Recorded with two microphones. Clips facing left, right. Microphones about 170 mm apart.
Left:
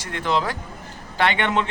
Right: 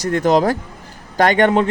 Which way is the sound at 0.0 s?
45° right (ahead or behind).